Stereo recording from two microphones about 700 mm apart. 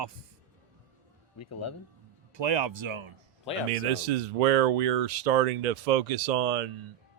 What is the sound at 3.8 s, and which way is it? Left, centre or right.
Speech, right.